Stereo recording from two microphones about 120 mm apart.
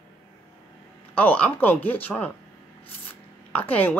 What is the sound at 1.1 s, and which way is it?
A woman's voice, 15° left (ahead or behind).